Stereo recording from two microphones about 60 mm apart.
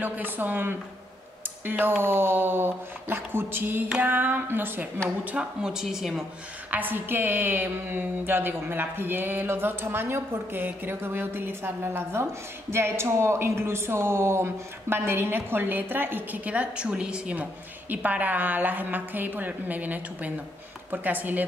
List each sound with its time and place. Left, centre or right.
0.0 s speech: right
5.2 s speech: centre
6.7 s speech: right